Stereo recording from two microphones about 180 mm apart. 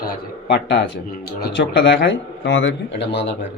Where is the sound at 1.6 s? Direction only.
75° left (ahead or behind).